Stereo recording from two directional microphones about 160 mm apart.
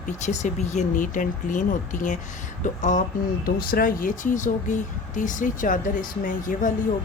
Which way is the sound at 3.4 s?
65° left (ahead or behind).